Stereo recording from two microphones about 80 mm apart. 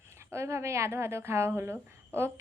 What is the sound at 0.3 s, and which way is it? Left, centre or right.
Speech, right.